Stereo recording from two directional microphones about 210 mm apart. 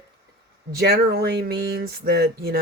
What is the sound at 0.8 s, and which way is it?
Speech, 50° right (ahead or behind).